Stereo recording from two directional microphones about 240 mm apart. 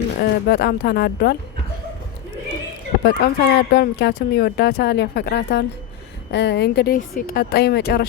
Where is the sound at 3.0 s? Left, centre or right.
Left.